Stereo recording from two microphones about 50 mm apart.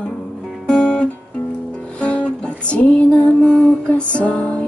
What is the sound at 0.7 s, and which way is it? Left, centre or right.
Guitar, centre.